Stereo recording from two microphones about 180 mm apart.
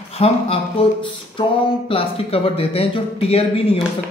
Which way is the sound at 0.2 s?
35° left (ahead or behind).